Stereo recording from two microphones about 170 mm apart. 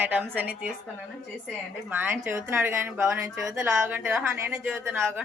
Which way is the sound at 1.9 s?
10° right (ahead or behind).